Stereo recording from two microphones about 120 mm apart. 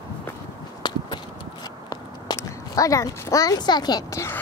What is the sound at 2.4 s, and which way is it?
Speech, 30° left (ahead or behind).